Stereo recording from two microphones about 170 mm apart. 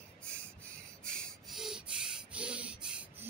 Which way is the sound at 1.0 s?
5° left (ahead or behind).